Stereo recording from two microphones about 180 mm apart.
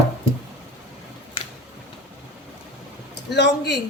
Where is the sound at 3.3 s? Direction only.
70° left (ahead or behind).